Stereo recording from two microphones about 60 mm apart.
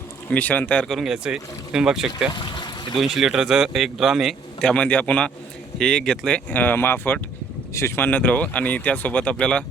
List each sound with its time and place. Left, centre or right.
0.3 s speech: left
0.9 s a man's voice: centre
4.6 s speech: centre
6.5 s speech: left
7.7 s speech: left
7.9 s speech: left; by 9.6 s centre